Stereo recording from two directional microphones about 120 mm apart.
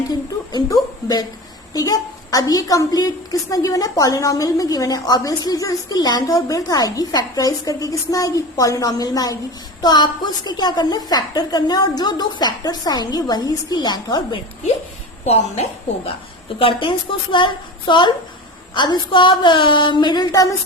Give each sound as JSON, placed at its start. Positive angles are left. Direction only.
{"t": 0.1, "sound": "a woman's voice", "side_deg": 35}
{"t": 15.2, "sound": "a woman's voice", "side_deg": 65}
{"t": 16.6, "sound": "a woman's voice", "side_deg": 45}